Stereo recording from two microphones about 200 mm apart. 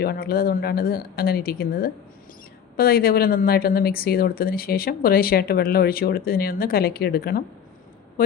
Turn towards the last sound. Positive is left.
turn(degrees=50)  # may be behind; listen again after turning